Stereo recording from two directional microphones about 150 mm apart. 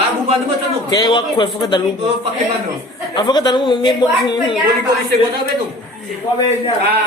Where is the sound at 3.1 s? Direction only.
25° left (ahead or behind).